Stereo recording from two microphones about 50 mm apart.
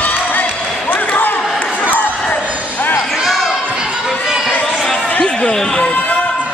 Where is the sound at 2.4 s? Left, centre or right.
Right.